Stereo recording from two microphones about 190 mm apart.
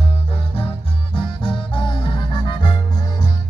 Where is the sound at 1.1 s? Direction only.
25° left (ahead or behind).